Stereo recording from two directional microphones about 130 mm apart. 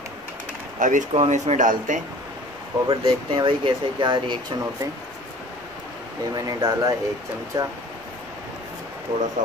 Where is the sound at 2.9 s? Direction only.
40° right (ahead or behind).